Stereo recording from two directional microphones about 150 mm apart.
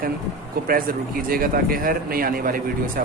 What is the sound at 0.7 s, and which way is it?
Speech, 70° right (ahead or behind).